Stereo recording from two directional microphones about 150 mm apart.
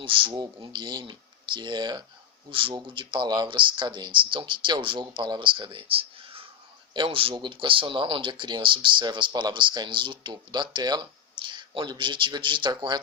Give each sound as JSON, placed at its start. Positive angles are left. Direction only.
{"t": 0.0, "sound": "speech", "side_deg": -35}